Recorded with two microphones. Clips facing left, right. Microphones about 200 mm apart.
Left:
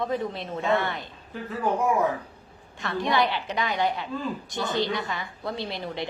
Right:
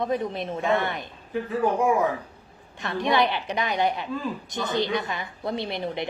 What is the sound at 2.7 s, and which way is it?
A woman's voice, 20° right (ahead or behind).